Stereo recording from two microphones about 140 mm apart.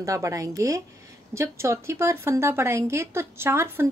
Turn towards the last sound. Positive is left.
turn(degrees=-15)  # may be behind; listen again after turning